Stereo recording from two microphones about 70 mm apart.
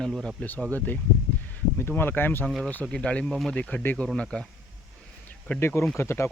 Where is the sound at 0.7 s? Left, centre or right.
Left.